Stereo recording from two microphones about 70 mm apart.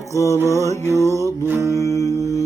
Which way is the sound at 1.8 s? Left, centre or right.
Left.